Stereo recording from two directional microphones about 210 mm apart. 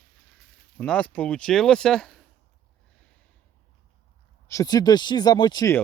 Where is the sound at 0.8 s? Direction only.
5° left (ahead or behind).